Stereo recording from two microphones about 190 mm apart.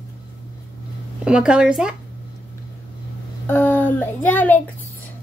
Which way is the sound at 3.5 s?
10° left (ahead or behind).